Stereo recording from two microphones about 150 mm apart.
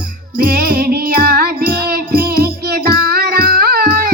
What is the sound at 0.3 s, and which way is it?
Music, 80° right.